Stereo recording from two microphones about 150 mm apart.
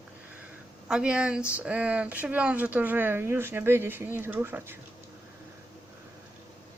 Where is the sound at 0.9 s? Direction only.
5° right (ahead or behind).